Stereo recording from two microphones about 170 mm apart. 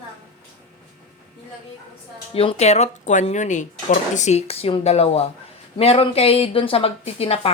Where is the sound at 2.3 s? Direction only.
35° left (ahead or behind).